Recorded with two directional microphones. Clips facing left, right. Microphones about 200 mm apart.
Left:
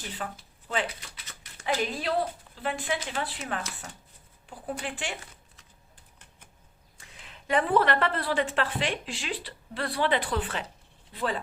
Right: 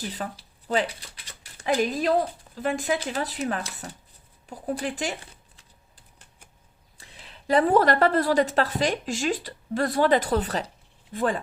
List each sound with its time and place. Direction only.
0.1 s a woman's voice: 40° right (ahead or behind)
6.9 s a woman's voice: 35° right (ahead or behind)